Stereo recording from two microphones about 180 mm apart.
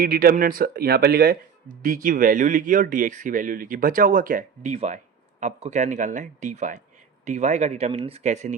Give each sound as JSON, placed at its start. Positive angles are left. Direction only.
{"t": 0.0, "sound": "speech", "side_deg": -55}